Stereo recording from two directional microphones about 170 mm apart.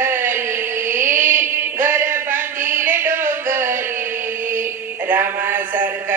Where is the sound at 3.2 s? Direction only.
15° right (ahead or behind).